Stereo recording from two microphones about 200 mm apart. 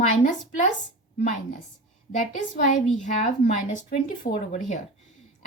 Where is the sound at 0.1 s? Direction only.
35° left (ahead or behind).